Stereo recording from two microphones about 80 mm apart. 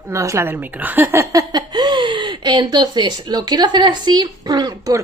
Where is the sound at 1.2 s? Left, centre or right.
Right.